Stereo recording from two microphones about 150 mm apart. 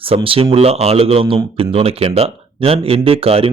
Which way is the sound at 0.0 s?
40° right (ahead or behind).